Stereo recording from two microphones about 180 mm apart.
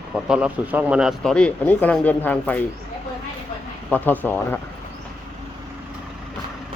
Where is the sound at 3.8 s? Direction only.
10° left (ahead or behind).